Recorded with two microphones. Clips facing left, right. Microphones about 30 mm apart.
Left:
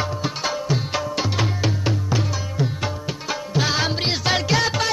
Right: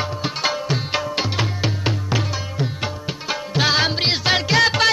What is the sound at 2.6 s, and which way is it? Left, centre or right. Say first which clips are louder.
Tabla: left 1 dB; right.